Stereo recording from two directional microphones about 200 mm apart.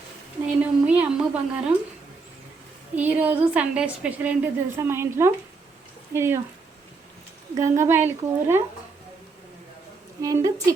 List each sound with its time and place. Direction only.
0.4 s a woman's voice: 5° right (ahead or behind)
2.9 s a woman's voice: 10° right (ahead or behind)
7.5 s a woman's voice: 15° right (ahead or behind)
10.2 s a woman's voice: 15° right (ahead or behind)